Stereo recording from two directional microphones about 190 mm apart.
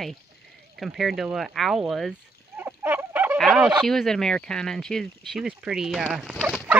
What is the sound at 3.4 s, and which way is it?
Fowl, centre (ahead or behind).